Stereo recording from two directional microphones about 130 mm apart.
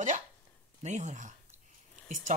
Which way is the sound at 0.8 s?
70° right (ahead or behind).